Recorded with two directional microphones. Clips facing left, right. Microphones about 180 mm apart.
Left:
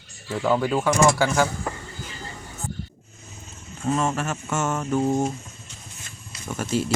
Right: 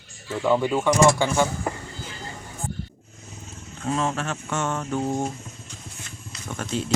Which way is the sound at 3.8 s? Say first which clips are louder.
Left 2 dB; 5° left (ahead or behind).